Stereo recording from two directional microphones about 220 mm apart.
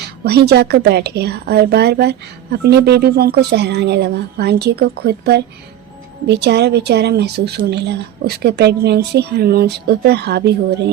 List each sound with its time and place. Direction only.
0.3 s a woman's voice: 50° right (ahead or behind)